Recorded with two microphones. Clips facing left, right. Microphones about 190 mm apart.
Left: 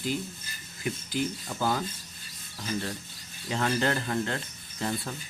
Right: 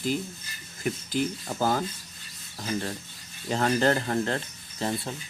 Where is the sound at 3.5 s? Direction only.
40° right (ahead or behind).